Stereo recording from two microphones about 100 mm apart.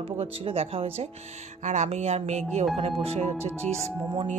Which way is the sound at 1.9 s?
90° right.